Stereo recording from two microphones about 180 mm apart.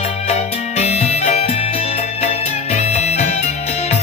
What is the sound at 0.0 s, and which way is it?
Music, 35° left (ahead or behind).